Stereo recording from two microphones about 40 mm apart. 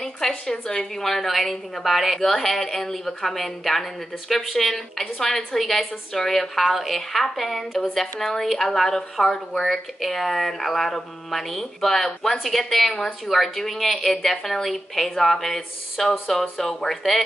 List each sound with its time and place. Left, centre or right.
0.5 s a woman's voice: centre
5.2 s a woman's voice: centre
7.9 s a woman's voice: centre